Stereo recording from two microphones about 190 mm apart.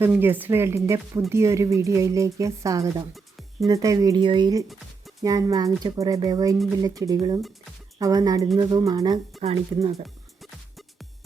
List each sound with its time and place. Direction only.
0.0 s speech: 10° right (ahead or behind)
9.4 s speech: 30° right (ahead or behind)